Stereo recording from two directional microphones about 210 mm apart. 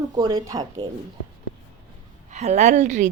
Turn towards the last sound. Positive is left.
turn(degrees=-35)  # may be behind; listen again after turning